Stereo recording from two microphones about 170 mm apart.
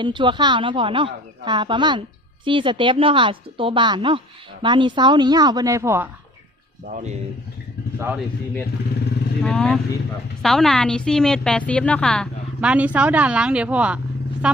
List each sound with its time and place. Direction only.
0.0 s speech: 30° right (ahead or behind)
6.8 s speech: 45° right (ahead or behind)
7.9 s speech: 15° right (ahead or behind)
9.4 s a woman's voice: 5° left (ahead or behind)
12.5 s a woman's voice: 10° right (ahead or behind)